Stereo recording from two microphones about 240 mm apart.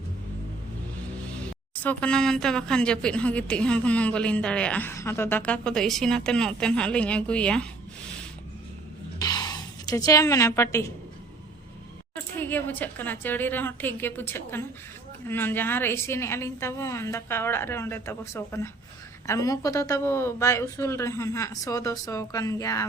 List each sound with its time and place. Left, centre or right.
1.7 s a woman's voice: centre
9.1 s a sound: centre
12.1 s speech: centre